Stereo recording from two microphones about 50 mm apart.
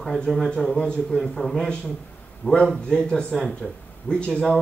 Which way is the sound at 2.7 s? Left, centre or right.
Centre.